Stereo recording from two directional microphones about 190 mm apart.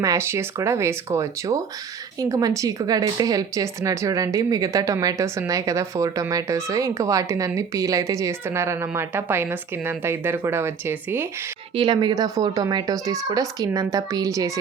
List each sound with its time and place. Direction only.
0.0 s speech: 15° right (ahead or behind)
11.7 s speech: 25° right (ahead or behind)